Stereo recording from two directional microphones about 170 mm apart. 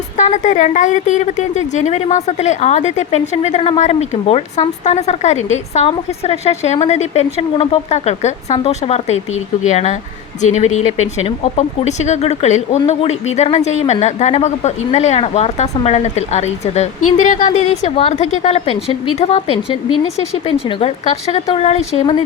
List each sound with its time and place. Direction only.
0.2 s a woman's voice: 45° left (ahead or behind)